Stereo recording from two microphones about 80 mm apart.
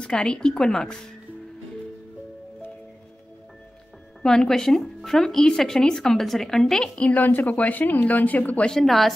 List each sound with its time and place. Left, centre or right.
0.0 s speech: centre
4.2 s speech: centre
7.1 s speech: left
8.7 s speech: centre